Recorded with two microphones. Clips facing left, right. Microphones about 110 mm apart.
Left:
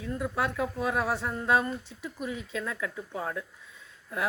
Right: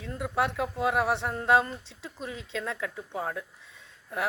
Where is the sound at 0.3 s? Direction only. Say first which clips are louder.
Right 4 dB; 25° right (ahead or behind).